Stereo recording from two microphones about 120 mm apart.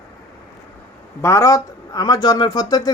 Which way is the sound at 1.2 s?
25° left (ahead or behind).